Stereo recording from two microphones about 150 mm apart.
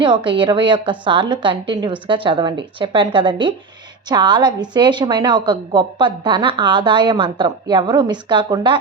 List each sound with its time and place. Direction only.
0.3 s a woman's voice: 30° right (ahead or behind)